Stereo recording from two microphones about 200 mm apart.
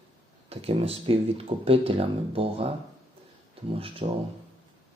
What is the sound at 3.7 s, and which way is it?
Speech, 30° right (ahead or behind).